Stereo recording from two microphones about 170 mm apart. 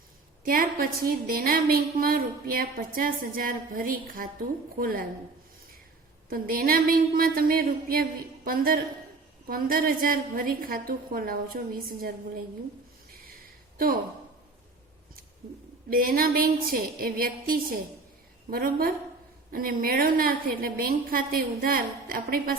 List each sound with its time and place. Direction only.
0.4 s a woman's voice: 55° right (ahead or behind)
6.3 s a woman's voice: 60° right (ahead or behind)
13.7 s speech: 55° right (ahead or behind)
15.9 s a woman's voice: 60° right (ahead or behind)